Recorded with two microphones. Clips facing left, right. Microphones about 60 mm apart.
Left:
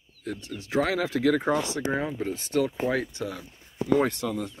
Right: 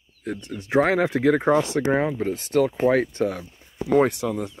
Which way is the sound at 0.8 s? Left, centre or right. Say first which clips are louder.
Right 6 dB; right.